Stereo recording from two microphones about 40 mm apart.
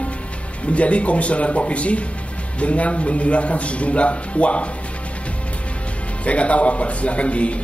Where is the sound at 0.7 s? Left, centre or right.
Left.